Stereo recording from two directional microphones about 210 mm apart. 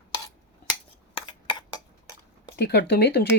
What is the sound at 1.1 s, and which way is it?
Cutlery, 25° left (ahead or behind).